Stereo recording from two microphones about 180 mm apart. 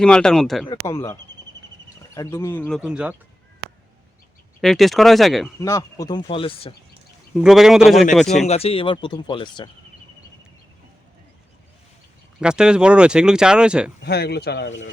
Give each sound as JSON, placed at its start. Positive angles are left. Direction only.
{"t": 0.0, "sound": "speech", "side_deg": 5}
{"t": 0.7, "sound": "speech", "side_deg": 15}
{"t": 4.6, "sound": "speech", "side_deg": 0}
{"t": 5.5, "sound": "speech", "side_deg": 15}
{"t": 7.3, "sound": "speech", "side_deg": 0}
{"t": 8.4, "sound": "speech", "side_deg": 35}
{"t": 12.4, "sound": "speech", "side_deg": -5}
{"t": 14.0, "sound": "speech", "side_deg": 65}